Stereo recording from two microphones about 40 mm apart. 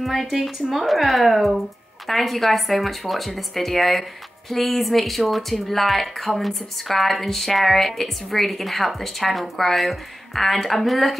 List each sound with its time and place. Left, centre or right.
0.0 s speech: centre